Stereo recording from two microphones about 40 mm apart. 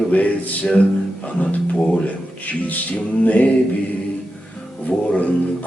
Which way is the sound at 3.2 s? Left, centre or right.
Left.